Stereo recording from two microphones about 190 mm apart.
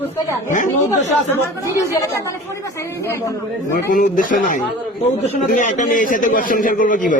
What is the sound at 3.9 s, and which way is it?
Speech, 45° left (ahead or behind).